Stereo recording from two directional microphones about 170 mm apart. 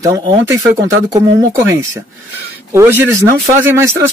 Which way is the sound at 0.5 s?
20° right (ahead or behind).